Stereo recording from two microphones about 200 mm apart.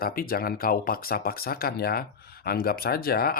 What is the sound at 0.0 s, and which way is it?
Speech, 45° left (ahead or behind).